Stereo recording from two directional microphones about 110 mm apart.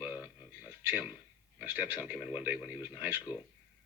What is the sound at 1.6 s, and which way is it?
Speech, 15° right (ahead or behind).